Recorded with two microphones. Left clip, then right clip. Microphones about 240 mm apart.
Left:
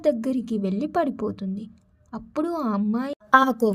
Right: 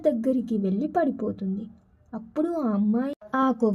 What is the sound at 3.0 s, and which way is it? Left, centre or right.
Speech, left.